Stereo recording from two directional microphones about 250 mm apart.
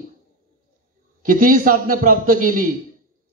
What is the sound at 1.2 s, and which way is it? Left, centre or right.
A man's voice, right.